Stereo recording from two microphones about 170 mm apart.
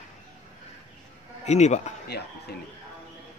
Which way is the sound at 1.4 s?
40° left (ahead or behind).